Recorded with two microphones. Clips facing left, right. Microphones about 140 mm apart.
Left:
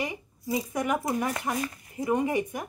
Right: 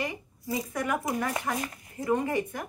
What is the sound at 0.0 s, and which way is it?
Speech, 15° left (ahead or behind).